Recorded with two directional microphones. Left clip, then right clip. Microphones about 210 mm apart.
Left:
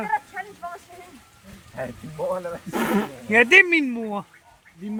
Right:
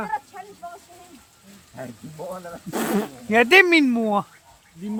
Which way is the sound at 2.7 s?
55° right (ahead or behind).